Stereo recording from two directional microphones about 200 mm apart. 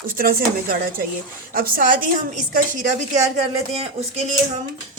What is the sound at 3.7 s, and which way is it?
Speech, 30° right (ahead or behind).